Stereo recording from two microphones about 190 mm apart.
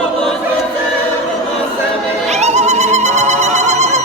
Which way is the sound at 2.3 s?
35° right (ahead or behind).